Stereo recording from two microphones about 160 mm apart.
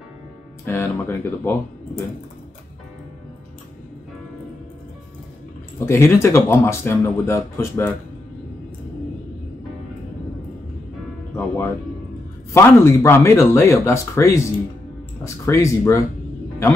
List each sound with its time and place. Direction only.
0.7 s speech: 15° left (ahead or behind)
5.9 s speech: 15° left (ahead or behind)
11.3 s music: 15° left (ahead or behind)
12.5 s speech: 15° left (ahead or behind)